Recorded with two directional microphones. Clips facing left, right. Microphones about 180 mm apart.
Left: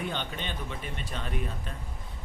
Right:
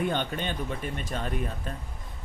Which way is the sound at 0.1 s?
50° right (ahead or behind).